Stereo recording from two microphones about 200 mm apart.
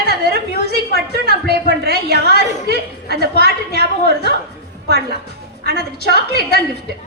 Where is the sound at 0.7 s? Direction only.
55° right (ahead or behind).